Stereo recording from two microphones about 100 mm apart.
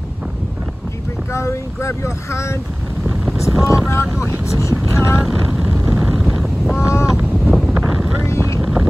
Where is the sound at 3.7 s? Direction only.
25° left (ahead or behind).